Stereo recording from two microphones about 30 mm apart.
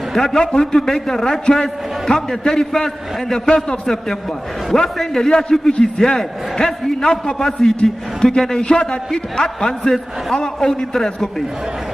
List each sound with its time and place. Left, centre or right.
0.1 s a man's voice: centre
5.3 s a man's voice: left
6.1 s a man's voice: centre